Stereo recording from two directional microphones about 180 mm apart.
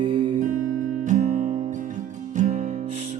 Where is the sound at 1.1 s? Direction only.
45° right (ahead or behind).